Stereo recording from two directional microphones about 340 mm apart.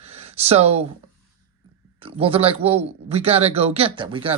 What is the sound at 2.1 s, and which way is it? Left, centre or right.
Speech, centre.